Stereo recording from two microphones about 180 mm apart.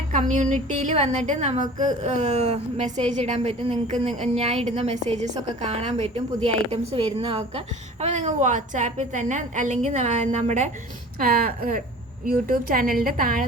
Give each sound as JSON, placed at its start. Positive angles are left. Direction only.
{"t": 0.1, "sound": "a woman's voice", "side_deg": -45}
{"t": 11.2, "sound": "a woman's voice", "side_deg": -55}